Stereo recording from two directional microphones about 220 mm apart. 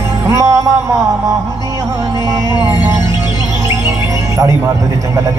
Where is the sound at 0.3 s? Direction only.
15° right (ahead or behind).